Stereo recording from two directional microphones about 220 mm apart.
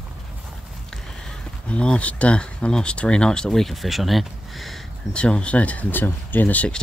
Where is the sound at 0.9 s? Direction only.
Centre (ahead or behind).